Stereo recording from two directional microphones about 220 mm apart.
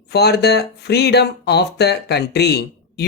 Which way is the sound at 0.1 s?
50° left (ahead or behind).